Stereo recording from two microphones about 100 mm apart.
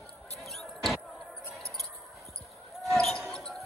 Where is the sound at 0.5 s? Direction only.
Centre (ahead or behind).